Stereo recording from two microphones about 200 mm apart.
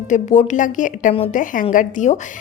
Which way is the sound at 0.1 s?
35° left (ahead or behind).